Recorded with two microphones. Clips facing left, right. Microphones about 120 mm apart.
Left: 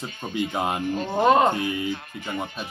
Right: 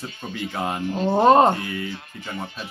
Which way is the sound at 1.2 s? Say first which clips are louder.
Right 3 dB; 35° right (ahead or behind).